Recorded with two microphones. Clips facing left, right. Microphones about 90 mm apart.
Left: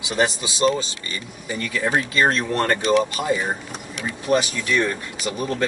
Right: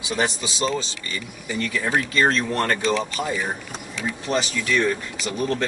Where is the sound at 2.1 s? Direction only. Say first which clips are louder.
Even; 15° left (ahead or behind).